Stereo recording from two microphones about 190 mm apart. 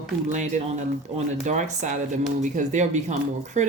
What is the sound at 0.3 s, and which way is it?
Speech, 40° right (ahead or behind).